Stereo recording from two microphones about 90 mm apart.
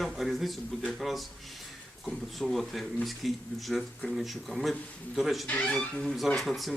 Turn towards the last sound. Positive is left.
turn(degrees=0)  # may be behind; listen again after turning